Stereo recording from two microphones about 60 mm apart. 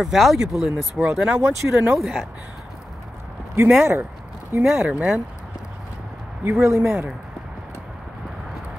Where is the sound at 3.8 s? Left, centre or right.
Right.